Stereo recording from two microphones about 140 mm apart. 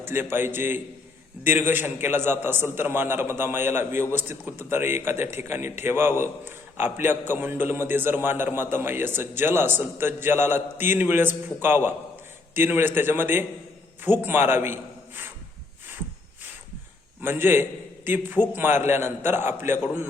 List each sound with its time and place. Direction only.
0.0 s a man's voice: 15° right (ahead or behind)
17.2 s a man's voice: 15° right (ahead or behind)